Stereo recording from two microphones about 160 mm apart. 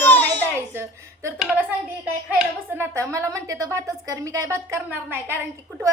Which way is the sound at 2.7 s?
15° right (ahead or behind).